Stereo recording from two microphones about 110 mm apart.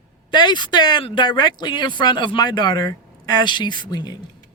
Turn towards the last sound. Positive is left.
turn(degrees=40)  # may be behind; listen again after turning